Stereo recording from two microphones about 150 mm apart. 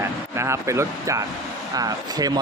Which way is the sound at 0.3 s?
20° right (ahead or behind).